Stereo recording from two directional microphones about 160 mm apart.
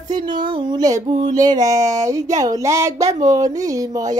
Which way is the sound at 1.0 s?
50° right (ahead or behind).